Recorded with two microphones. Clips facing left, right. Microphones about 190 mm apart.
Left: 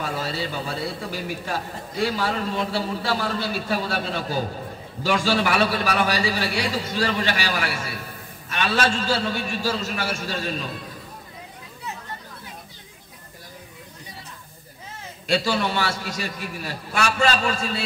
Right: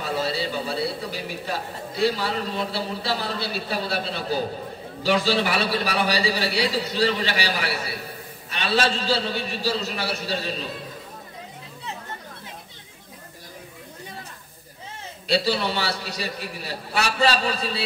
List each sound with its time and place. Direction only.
0.0 s a man's voice: 45° left (ahead or behind)
15.2 s a man's voice: 45° left (ahead or behind)